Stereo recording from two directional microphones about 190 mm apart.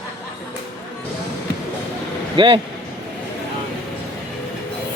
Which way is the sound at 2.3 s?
25° right (ahead or behind).